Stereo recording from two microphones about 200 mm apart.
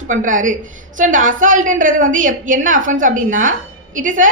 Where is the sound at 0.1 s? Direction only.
40° right (ahead or behind).